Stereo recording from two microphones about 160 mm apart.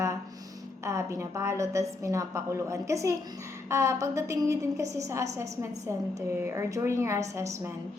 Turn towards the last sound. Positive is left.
turn(degrees=-20)  # may be behind; listen again after turning